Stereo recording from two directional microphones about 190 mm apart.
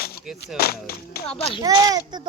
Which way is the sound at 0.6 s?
55° left (ahead or behind).